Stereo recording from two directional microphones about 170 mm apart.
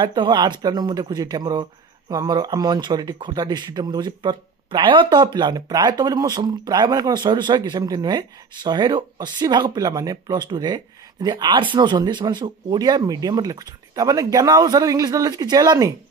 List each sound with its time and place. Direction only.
0.0 s speech: 25° right (ahead or behind)